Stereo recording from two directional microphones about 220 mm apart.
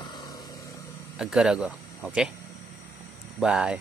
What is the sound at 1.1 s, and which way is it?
Speech, 5° right (ahead or behind).